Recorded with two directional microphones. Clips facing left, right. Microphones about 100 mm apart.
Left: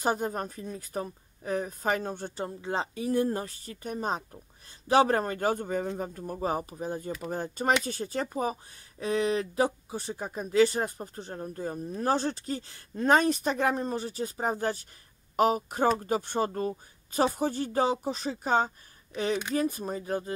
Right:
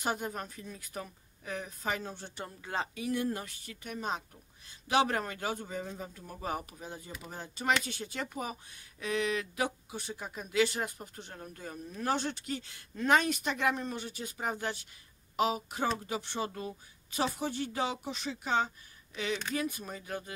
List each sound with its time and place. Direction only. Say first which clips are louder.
0.0 s speech: left 6 dB; 40° left (ahead or behind)
2.3 s speech: left 4 dB; 30° left (ahead or behind)